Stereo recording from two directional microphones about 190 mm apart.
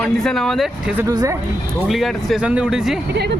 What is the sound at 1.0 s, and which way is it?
Speech, 20° right (ahead or behind).